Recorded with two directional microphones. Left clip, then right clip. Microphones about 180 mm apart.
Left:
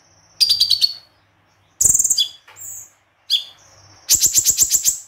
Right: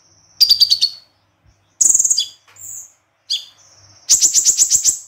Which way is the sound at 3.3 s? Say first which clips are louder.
Left 3 dB; centre (ahead or behind).